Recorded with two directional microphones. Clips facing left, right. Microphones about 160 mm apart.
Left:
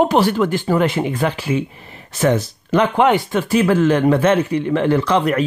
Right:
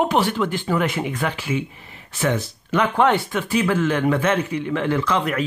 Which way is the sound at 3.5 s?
35° left (ahead or behind).